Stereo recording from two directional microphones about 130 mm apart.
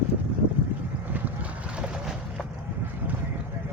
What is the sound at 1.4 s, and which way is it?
Boat, 5° right (ahead or behind).